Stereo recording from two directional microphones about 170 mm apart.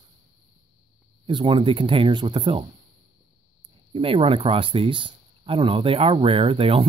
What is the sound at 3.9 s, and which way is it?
Speech, 35° right (ahead or behind).